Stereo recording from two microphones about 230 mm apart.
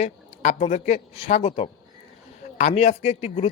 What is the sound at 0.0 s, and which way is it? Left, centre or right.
Speech, left.